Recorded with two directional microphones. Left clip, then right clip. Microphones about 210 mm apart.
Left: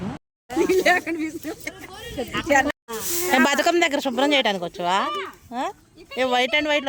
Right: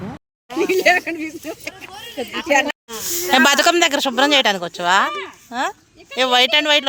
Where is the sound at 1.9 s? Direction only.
55° left (ahead or behind).